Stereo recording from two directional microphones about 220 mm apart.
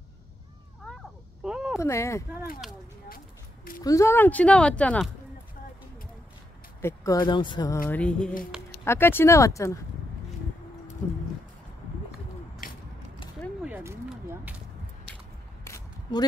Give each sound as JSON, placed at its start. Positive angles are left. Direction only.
{"t": 0.9, "sound": "a sound", "side_deg": 5}
{"t": 1.8, "sound": "speech", "side_deg": 15}
{"t": 3.8, "sound": "speech", "side_deg": 15}
{"t": 6.8, "sound": "speech", "side_deg": 15}
{"t": 7.9, "sound": "music", "side_deg": 5}
{"t": 8.8, "sound": "speech", "side_deg": 10}
{"t": 12.6, "sound": "biting", "side_deg": 40}
{"t": 13.6, "sound": "a sound", "side_deg": -10}
{"t": 15.6, "sound": "single-lens reflex camera", "side_deg": 15}